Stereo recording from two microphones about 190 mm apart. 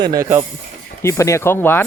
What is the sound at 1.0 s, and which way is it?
Speech, 15° left (ahead or behind).